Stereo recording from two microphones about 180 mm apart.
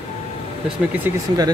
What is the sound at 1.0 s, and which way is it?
Speech, 20° right (ahead or behind).